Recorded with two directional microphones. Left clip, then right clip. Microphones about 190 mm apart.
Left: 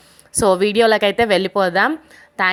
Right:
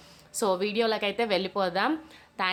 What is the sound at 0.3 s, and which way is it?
A woman's voice, 35° left (ahead or behind).